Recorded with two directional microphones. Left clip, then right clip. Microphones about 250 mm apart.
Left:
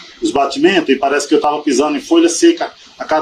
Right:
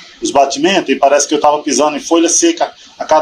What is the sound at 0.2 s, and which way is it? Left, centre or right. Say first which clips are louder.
Speech: right 2 dB; right.